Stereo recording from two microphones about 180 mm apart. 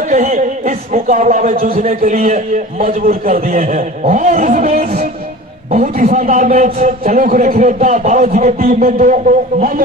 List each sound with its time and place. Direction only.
0.1 s a man's voice: 45° right (ahead or behind)
3.4 s a man's voice: 40° right (ahead or behind)